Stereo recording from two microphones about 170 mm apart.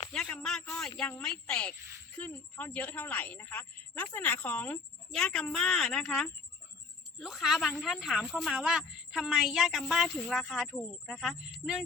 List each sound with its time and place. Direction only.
0.1 s a woman's voice: 5° left (ahead or behind)
1.7 s speech: 15° right (ahead or behind)
2.1 s a woman's voice: 10° left (ahead or behind)